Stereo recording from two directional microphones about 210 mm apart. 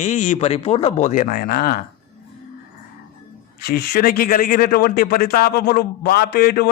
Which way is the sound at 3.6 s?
45° left (ahead or behind).